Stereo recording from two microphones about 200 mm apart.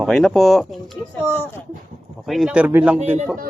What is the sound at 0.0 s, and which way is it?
Speech, centre (ahead or behind).